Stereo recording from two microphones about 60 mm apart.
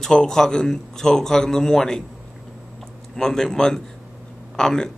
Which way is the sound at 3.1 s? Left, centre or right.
Centre.